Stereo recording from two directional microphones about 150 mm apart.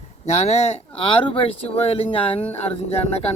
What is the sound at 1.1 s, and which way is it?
Speech, 40° left (ahead or behind).